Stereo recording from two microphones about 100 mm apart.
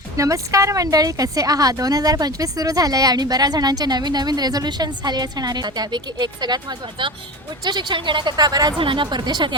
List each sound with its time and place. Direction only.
0.2 s a woman's voice: 30° right (ahead or behind)
8.8 s a woman's voice: 55° right (ahead or behind)